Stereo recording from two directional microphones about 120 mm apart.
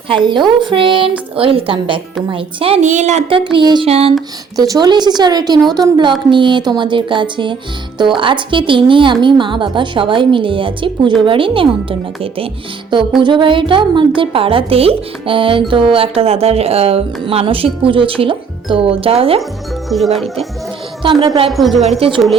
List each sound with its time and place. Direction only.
0.3 s a woman's voice: 40° right (ahead or behind)
2.8 s a woman's voice: 85° right
3.2 s a woman's voice: 45° right (ahead or behind)
3.8 s speech: 60° right (ahead or behind)
4.5 s a woman's voice: 30° right (ahead or behind); by 19.4 s 50° right (ahead or behind)
19.9 s speech: centre (ahead or behind)
21.0 s a woman's voice: 45° right (ahead or behind)
21.5 s speech: centre (ahead or behind)
21.8 s a woman's voice: 50° right (ahead or behind)